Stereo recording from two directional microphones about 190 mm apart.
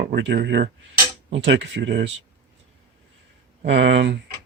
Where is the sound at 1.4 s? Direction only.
70° right (ahead or behind).